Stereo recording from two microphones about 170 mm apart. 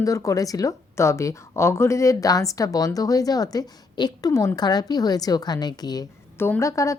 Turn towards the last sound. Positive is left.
turn(degrees=20)  # may be behind; listen again after turning